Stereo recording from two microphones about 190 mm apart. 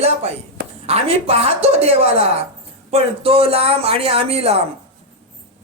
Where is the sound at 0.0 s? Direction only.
35° right (ahead or behind).